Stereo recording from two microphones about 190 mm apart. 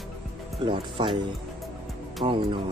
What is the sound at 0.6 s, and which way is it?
Speech, 25° right (ahead or behind).